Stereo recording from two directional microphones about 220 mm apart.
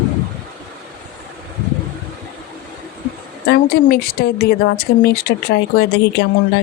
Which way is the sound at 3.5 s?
45° left (ahead or behind).